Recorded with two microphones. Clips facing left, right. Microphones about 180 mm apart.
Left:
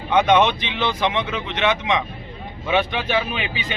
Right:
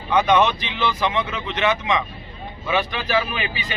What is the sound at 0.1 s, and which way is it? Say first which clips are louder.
Speech: left 1 dB; 25° left (ahead or behind).